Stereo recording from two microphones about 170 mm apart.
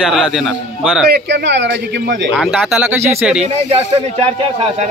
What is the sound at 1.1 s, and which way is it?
Speech, 90° right.